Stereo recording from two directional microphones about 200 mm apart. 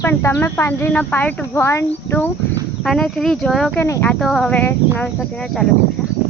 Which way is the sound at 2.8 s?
Centre (ahead or behind).